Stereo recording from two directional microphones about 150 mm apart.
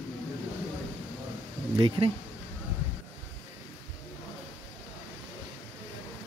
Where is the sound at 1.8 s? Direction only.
35° right (ahead or behind).